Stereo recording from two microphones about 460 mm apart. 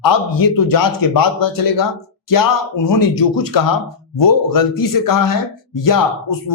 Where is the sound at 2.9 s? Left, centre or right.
Left.